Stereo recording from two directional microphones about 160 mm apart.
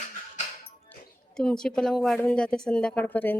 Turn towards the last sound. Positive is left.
turn(degrees=10)  # may be behind; listen again after turning